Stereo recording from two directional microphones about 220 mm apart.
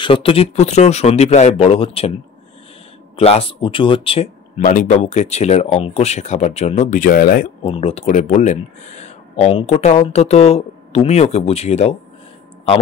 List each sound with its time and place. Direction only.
0.0 s speech: 25° left (ahead or behind)
3.2 s speech: 25° left (ahead or behind)
7.7 s speech: 30° left (ahead or behind)